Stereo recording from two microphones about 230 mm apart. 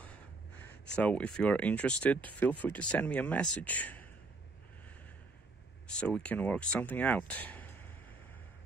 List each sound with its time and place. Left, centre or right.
0.9 s speech: centre
5.9 s speech: centre